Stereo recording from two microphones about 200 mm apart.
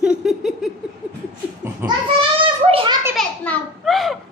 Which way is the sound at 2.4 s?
25° right (ahead or behind).